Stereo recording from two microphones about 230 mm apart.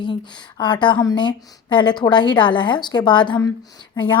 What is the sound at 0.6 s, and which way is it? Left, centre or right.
A woman's voice, left.